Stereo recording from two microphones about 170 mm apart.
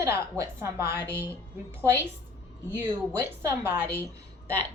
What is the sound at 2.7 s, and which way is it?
A woman's voice, 15° right (ahead or behind).